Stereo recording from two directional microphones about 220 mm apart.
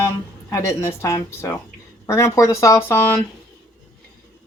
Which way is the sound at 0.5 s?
15° left (ahead or behind).